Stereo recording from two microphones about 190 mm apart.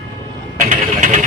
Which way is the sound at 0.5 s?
40° right (ahead or behind).